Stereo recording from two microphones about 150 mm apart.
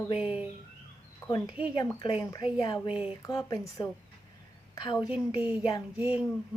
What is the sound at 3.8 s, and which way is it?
Speech, 30° left (ahead or behind).